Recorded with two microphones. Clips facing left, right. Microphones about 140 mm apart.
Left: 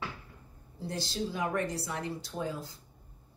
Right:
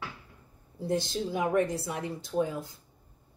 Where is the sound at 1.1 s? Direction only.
20° right (ahead or behind).